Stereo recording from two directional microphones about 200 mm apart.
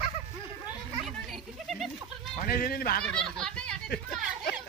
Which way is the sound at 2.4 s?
45° left (ahead or behind).